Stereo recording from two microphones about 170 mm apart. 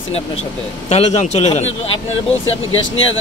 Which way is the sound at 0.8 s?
40° left (ahead or behind).